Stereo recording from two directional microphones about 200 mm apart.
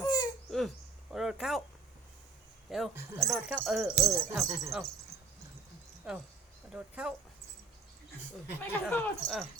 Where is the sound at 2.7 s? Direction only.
Centre (ahead or behind).